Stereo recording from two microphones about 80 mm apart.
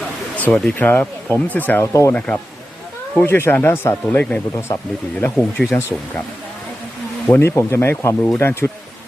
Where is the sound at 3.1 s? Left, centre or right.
Left.